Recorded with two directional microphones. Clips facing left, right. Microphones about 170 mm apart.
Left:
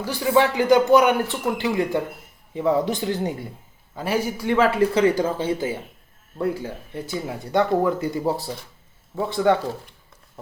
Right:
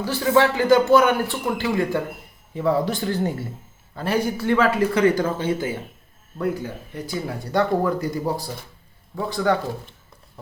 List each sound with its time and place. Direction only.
0.0 s a man's voice: 15° left (ahead or behind)